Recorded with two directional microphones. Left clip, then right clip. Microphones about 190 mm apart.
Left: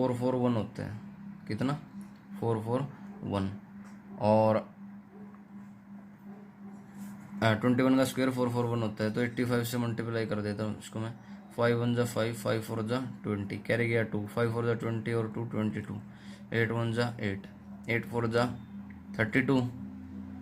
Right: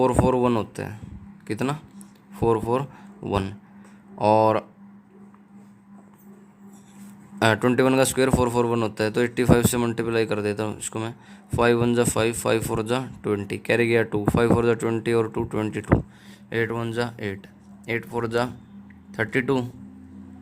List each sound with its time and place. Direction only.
0.0 s speech: 55° right (ahead or behind)
7.3 s speech: 55° right (ahead or behind)